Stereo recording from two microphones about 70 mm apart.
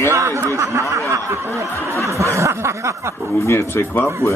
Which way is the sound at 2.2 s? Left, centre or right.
Right.